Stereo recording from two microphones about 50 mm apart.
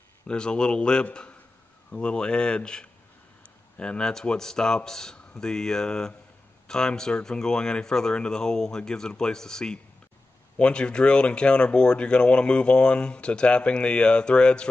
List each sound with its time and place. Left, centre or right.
0.3 s speech: centre
4.0 s speech: centre